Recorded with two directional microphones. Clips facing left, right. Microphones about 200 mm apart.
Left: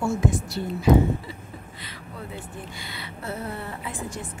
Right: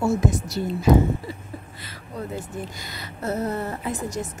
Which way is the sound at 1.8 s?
40° right (ahead or behind).